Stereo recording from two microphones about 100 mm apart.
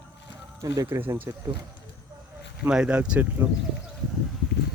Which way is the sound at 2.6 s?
10° right (ahead or behind).